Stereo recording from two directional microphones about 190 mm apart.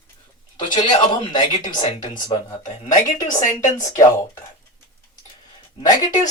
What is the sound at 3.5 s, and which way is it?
Speech, 20° left (ahead or behind).